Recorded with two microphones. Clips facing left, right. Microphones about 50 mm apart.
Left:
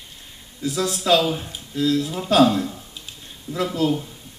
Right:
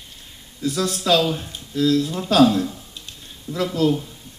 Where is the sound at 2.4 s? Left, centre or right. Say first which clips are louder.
Right 2 dB; centre.